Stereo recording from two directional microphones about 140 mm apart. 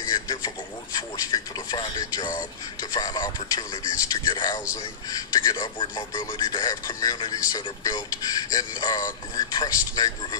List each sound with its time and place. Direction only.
0.1 s radio: 25° left (ahead or behind)
1.3 s speech: 30° left (ahead or behind)